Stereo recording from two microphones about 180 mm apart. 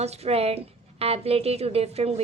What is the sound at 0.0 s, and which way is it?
A woman's voice, 35° right (ahead or behind).